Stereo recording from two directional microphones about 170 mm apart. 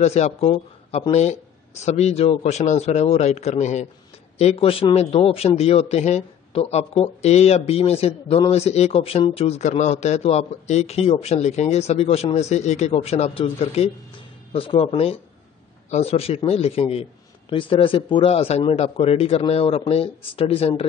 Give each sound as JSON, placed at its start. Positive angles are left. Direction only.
{"t": 0.0, "sound": "a man's voice", "side_deg": 40}